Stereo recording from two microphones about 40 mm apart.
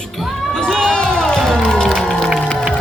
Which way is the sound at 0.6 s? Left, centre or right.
Centre.